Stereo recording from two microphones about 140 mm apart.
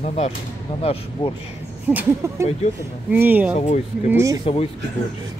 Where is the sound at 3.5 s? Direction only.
55° left (ahead or behind).